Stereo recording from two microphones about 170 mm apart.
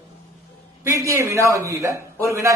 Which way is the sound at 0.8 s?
15° right (ahead or behind).